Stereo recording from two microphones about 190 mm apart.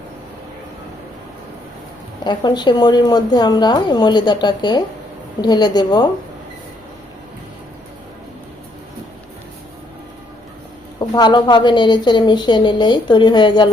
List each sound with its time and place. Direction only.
2.2 s speech: 25° left (ahead or behind)
11.1 s speech: 25° left (ahead or behind)